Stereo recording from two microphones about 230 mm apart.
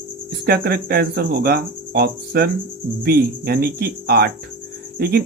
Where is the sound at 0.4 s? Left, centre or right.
Right.